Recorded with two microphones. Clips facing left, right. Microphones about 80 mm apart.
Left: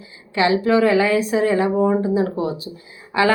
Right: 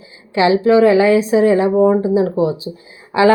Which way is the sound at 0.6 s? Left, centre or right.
Right.